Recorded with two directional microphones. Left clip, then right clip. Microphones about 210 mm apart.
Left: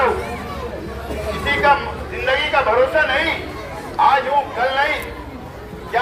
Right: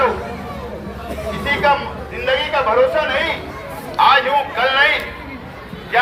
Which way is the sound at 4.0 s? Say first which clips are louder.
Right 2 dB; 5° left (ahead or behind).